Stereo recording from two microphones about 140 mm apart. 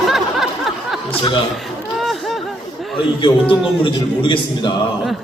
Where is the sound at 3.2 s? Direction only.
35° left (ahead or behind).